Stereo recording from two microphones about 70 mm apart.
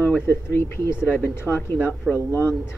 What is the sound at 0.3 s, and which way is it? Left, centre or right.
Speech, left.